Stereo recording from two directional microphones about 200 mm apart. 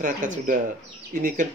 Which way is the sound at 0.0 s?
40° right (ahead or behind).